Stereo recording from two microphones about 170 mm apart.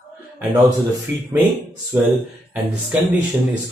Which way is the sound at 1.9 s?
15° right (ahead or behind).